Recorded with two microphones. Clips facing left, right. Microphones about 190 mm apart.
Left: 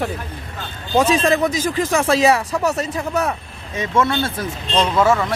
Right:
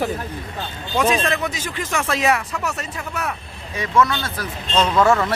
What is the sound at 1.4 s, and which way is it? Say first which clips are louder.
Speech: left 7 dB; 40° left (ahead or behind).